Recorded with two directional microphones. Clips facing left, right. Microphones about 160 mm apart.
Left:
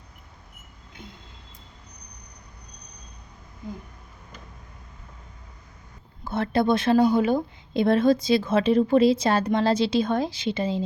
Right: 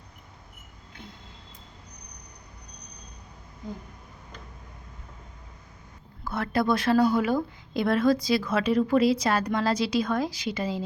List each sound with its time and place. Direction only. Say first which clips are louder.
6.2 s speech: left 3 dB; 25° left (ahead or behind)